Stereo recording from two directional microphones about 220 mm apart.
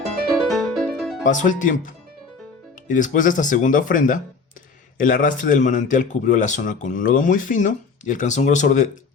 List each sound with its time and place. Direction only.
0.3 s music: centre (ahead or behind)
1.2 s speech: 35° left (ahead or behind)
2.9 s speech: 35° left (ahead or behind)